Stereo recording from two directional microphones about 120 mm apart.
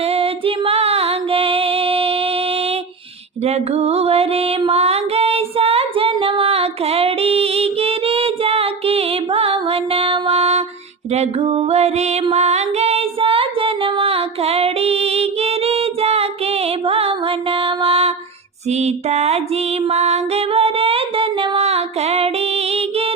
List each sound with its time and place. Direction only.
0.1 s music: 50° right (ahead or behind)
3.4 s music: 60° right (ahead or behind)
12.2 s female singing: 60° right (ahead or behind)
16.8 s music: 55° right (ahead or behind)
18.7 s a sound: 65° right (ahead or behind)
19.9 s female singing: 60° right (ahead or behind)